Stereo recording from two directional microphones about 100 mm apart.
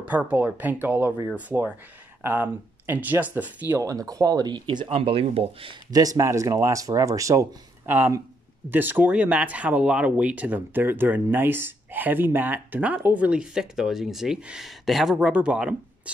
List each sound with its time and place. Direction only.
0.3 s speech: 15° right (ahead or behind)
3.6 s speech: 30° right (ahead or behind); by 4.9 s 50° right (ahead or behind)
4.9 s speech: 70° right (ahead or behind)
5.9 s speech: 40° right (ahead or behind)
7.8 s speech: 20° right (ahead or behind)